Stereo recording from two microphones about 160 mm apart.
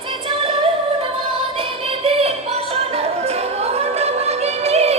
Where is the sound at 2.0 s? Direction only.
40° right (ahead or behind).